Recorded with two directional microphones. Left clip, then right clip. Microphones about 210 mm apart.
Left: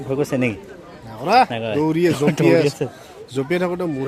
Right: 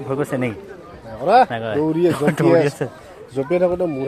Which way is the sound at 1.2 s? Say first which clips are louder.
Right 1 dB; 50° left (ahead or behind).